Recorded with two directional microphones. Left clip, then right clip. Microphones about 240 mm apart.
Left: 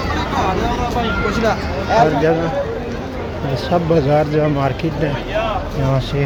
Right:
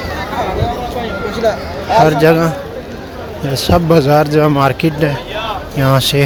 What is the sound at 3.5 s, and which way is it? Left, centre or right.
Speech, right.